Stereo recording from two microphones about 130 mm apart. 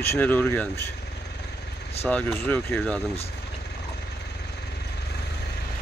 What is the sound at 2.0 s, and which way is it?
Speech, 10° left (ahead or behind).